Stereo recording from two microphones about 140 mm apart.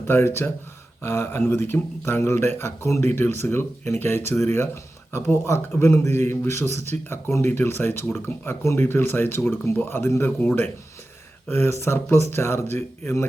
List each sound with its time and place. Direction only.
0.1 s speech: 15° left (ahead or behind)